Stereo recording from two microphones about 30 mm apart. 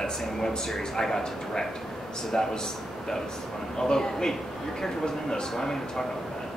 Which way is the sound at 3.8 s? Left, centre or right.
Centre.